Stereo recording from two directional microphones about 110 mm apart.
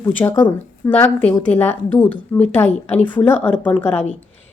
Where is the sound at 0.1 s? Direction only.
15° left (ahead or behind).